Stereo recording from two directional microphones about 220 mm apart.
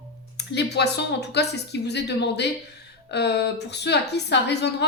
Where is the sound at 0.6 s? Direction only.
50° left (ahead or behind).